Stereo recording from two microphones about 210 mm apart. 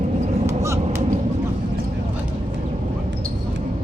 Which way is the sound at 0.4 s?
10° right (ahead or behind).